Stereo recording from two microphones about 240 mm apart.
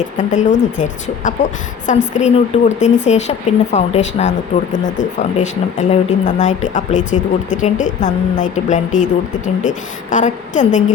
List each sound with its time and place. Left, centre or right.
0.2 s speech: left